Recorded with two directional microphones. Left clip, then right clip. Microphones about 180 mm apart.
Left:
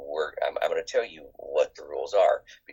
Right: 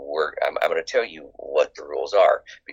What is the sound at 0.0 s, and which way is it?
Speech, 30° right (ahead or behind).